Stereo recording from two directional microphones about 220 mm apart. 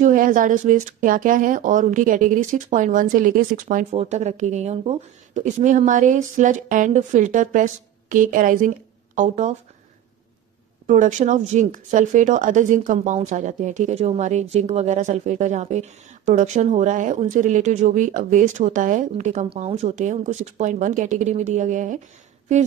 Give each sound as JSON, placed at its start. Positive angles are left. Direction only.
{"t": 0.0, "sound": "speech", "side_deg": -35}
{"t": 10.9, "sound": "speech", "side_deg": -35}